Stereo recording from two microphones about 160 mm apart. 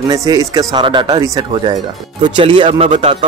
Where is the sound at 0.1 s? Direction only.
20° right (ahead or behind).